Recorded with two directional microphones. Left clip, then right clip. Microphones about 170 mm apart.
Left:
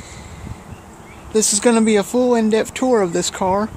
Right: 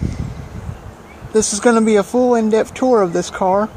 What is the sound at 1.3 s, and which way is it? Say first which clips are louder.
Speech: right 2 dB; 5° left (ahead or behind).